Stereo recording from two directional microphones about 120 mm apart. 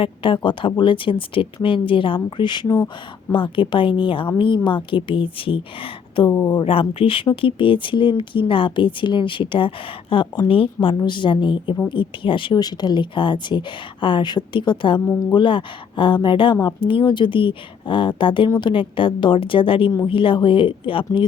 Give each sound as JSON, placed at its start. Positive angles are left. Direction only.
{"t": 0.0, "sound": "speech", "side_deg": 45}
{"t": 6.2, "sound": "speech", "side_deg": 30}
{"t": 15.0, "sound": "speech", "side_deg": 20}
{"t": 15.3, "sound": "speech", "side_deg": 40}